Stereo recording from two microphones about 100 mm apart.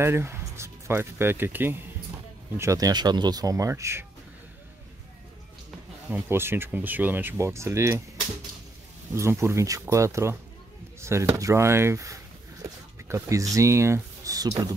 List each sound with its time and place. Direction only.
0.0 s speech: 25° right (ahead or behind)
2.9 s speech: 45° right (ahead or behind)
6.0 s speech: 20° right (ahead or behind)
9.1 s speech: 25° right (ahead or behind)
11.0 s chop: 30° right (ahead or behind)
11.3 s speech: 30° right (ahead or behind)